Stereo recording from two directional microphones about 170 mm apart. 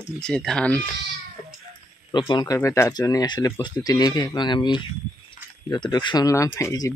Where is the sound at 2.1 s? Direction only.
25° left (ahead or behind).